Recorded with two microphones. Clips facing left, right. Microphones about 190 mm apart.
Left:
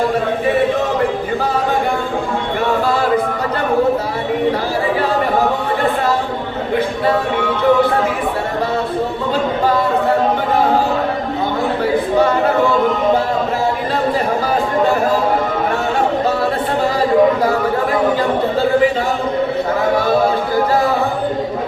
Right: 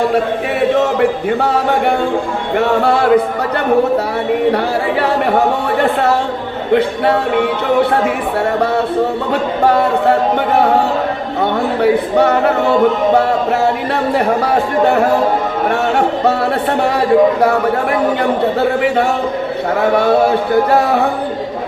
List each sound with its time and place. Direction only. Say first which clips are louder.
2.6 s music: right 5 dB; 65° right (ahead or behind)
9.3 s chatter: right 2 dB; 65° right (ahead or behind)
11.8 s speech: right 3 dB; 65° right (ahead or behind)
18.2 s speech: right 2 dB; 65° right (ahead or behind)